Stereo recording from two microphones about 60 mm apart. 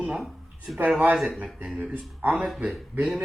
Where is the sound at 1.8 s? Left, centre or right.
Right.